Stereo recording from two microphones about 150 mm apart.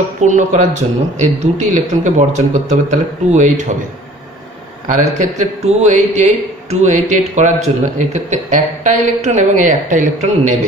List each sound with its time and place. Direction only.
0.2 s a man's voice: 55° right (ahead or behind)
4.8 s a man's voice: 50° right (ahead or behind)